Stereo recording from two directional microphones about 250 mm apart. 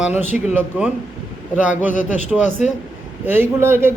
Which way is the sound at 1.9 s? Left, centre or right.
Left.